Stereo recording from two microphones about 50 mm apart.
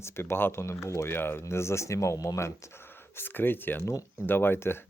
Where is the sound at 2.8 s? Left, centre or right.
Left.